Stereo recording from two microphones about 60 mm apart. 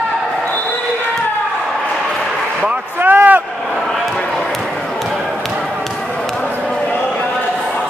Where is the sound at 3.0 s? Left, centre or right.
Right.